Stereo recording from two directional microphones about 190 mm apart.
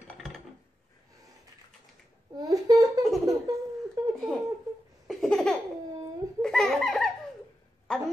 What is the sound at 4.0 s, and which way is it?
Speech, 20° right (ahead or behind).